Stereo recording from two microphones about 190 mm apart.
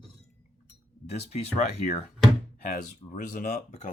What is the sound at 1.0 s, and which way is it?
Speech, 35° left (ahead or behind).